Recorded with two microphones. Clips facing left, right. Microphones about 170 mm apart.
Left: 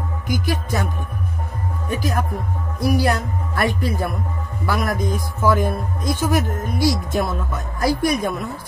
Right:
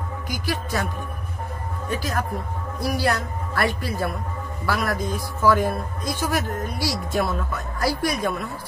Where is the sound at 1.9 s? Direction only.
15° left (ahead or behind).